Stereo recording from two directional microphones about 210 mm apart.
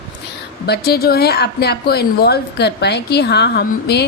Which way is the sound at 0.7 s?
50° left (ahead or behind).